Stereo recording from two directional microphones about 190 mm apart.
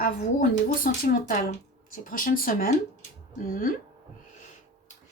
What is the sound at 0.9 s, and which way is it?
Speech, 45° left (ahead or behind).